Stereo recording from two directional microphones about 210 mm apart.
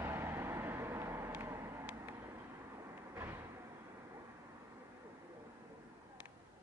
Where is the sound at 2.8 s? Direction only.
10° right (ahead or behind).